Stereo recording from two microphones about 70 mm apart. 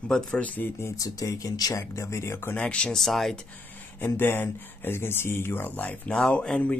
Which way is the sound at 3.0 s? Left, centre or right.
Centre.